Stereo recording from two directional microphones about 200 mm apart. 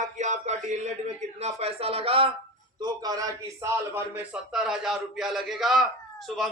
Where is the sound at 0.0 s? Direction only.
35° right (ahead or behind).